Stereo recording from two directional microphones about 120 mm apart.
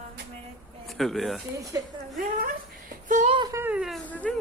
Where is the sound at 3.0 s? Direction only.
90° right.